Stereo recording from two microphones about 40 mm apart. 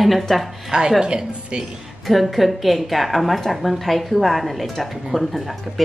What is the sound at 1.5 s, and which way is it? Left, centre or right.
Speech, right.